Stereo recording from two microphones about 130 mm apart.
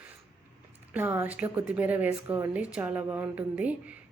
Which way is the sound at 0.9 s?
15° right (ahead or behind).